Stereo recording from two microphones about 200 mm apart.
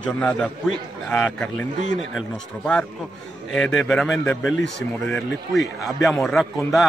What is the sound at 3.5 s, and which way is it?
Speech, centre (ahead or behind).